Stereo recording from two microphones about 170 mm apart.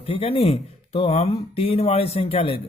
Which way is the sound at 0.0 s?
35° left (ahead or behind).